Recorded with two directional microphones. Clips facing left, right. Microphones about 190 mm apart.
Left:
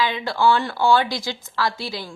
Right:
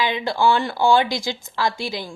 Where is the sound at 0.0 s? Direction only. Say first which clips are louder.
Even; 20° right (ahead or behind).